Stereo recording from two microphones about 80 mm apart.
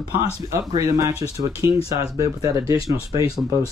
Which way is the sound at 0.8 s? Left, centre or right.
Right.